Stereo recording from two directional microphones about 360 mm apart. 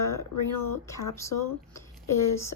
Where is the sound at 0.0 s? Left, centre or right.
Left.